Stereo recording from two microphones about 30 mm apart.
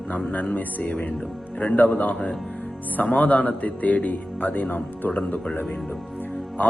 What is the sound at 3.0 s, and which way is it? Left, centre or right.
Speech, left.